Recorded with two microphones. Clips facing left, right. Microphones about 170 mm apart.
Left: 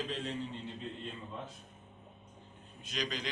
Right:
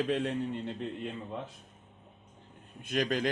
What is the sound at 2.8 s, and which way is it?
Speech, 55° right (ahead or behind).